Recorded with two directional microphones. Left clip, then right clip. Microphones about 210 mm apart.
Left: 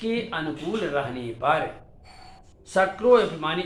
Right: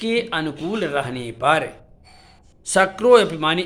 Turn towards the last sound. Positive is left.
turn(degrees=-60)  # may be behind; listen again after turning